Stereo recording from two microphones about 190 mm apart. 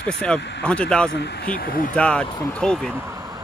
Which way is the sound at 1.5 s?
50° left (ahead or behind).